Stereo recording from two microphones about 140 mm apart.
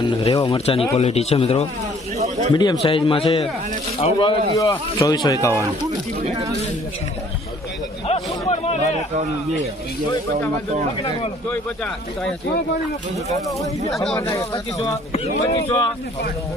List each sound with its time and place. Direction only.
0.0 s speech: 40° left (ahead or behind)
2.1 s a sound: 50° right (ahead or behind)
2.5 s a man's voice: 30° left (ahead or behind)
4.5 s speech: 20° left (ahead or behind)
8.0 s a sound: 45° left (ahead or behind)
13.6 s speech: centre (ahead or behind)
14.2 s speech: 20° left (ahead or behind)
15.5 s speech: 30° left (ahead or behind)